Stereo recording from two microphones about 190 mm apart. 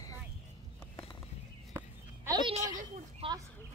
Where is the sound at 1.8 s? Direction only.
15° right (ahead or behind).